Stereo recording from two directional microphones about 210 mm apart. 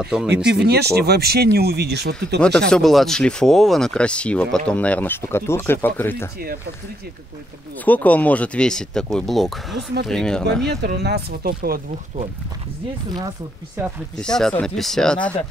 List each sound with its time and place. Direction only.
0.0 s speech: centre (ahead or behind)
0.5 s speech: 50° right (ahead or behind)
2.7 s speech: centre (ahead or behind)
7.8 s speech: 5° left (ahead or behind)
10.6 s speech: 50° right (ahead or behind)
14.1 s speech: 5° left (ahead or behind)